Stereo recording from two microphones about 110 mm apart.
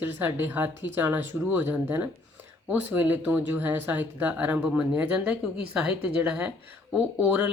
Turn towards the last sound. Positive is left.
turn(degrees=-10)  # may be behind; listen again after turning